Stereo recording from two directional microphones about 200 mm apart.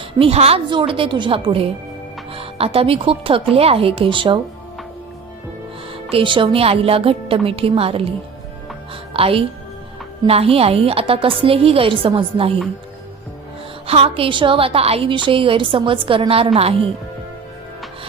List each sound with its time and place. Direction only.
0.2 s a woman's voice: 30° right (ahead or behind)
5.9 s a woman's voice: 30° right (ahead or behind)
9.1 s a woman's voice: 30° right (ahead or behind)
13.8 s a woman's voice: 30° right (ahead or behind)